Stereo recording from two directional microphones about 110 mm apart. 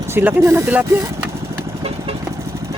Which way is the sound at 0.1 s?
20° right (ahead or behind).